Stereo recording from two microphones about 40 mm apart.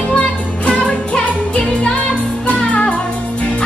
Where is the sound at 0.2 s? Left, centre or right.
Left.